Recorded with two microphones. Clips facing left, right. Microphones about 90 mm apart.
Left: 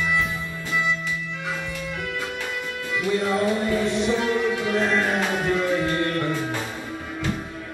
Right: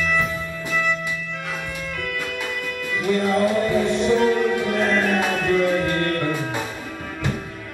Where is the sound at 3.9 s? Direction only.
55° right (ahead or behind).